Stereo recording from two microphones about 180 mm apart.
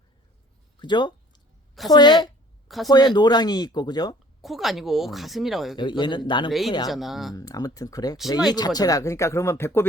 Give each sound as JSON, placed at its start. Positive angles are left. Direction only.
{"t": 0.8, "sound": "a sound", "side_deg": 25}
{"t": 1.9, "sound": "speech", "side_deg": 25}
{"t": 2.6, "sound": "speech", "side_deg": 0}
{"t": 2.9, "sound": "speech", "side_deg": 25}
{"t": 4.4, "sound": "a woman's voice", "side_deg": 0}
{"t": 5.7, "sound": "speech", "side_deg": 25}
{"t": 6.9, "sound": "a woman's voice", "side_deg": 0}
{"t": 7.3, "sound": "speech", "side_deg": 20}